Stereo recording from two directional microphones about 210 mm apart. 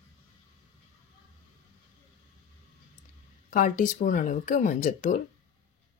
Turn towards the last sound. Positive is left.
turn(degrees=40)  # may be behind; listen again after turning